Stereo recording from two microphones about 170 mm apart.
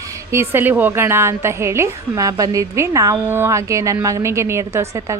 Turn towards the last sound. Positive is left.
turn(degrees=-15)  # may be behind; listen again after turning